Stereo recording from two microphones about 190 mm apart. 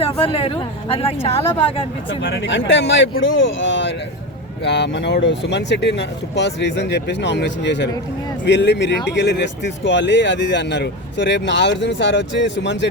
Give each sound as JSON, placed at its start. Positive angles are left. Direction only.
{"t": 0.0, "sound": "speech", "side_deg": 30}
{"t": 2.0, "sound": "speech", "side_deg": 70}